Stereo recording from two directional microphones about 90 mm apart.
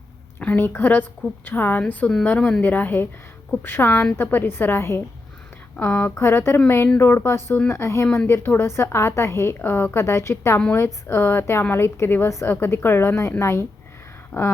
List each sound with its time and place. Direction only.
0.3 s a woman's voice: 20° left (ahead or behind)